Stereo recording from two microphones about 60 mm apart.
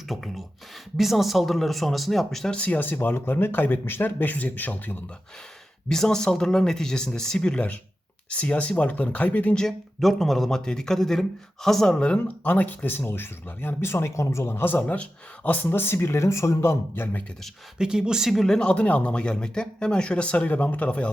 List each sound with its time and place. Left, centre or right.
0.1 s speech: centre
2.5 s speech: left
5.9 s speech: centre; by 9.6 s left
9.6 s speech: centre
11.9 s speech: centre
12.4 s speech: left
16.9 s speech: left
17.7 s speech: centre
18.7 s speech: left